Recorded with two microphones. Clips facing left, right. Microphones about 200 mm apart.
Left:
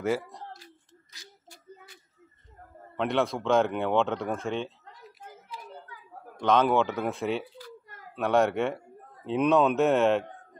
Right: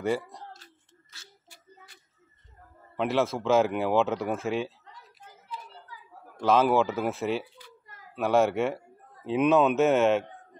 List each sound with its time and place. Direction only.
0.0 s speech: centre (ahead or behind)
1.1 s a sound: 15° left (ahead or behind)
3.0 s speech: centre (ahead or behind)
6.4 s a man's voice: 5° right (ahead or behind)